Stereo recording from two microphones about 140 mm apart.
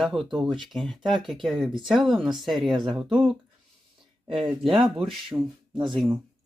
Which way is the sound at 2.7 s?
35° right (ahead or behind).